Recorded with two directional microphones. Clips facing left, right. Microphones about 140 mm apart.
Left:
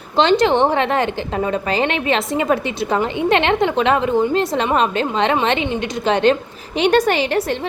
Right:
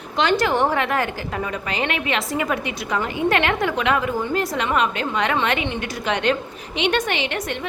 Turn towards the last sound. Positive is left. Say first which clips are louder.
# left 7 dB
turn(degrees=35)  # may be behind; listen again after turning